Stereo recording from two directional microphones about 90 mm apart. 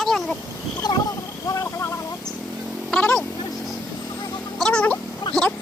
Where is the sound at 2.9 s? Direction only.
15° left (ahead or behind).